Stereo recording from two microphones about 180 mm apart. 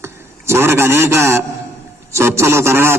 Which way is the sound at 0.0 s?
15° right (ahead or behind).